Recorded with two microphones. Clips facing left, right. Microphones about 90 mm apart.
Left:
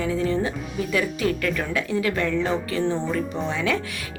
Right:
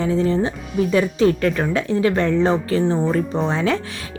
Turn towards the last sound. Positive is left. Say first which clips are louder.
# right 5 dB
turn(degrees=-35)  # may be behind; listen again after turning